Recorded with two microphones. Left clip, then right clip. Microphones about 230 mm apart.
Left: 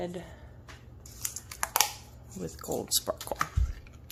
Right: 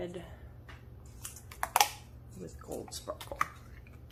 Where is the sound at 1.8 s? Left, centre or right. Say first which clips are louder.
Right 1 dB; centre.